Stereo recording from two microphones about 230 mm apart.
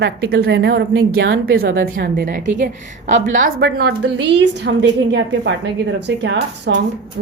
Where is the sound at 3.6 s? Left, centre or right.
Right.